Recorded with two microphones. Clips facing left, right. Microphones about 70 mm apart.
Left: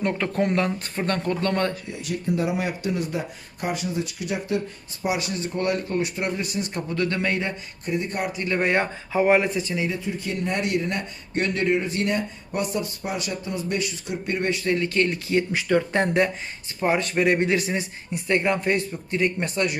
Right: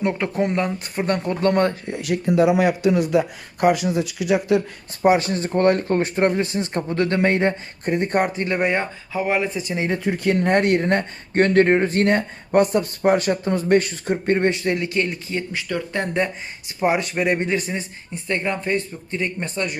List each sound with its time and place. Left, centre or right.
0.0 s speech: centre
1.0 s speech: centre
1.3 s speech: right
1.9 s speech: right
5.0 s speech: right
8.3 s speech: right
8.5 s speech: centre
9.1 s speech: centre
9.7 s speech: right
14.9 s speech: centre
15.5 s speech: centre
16.8 s speech: centre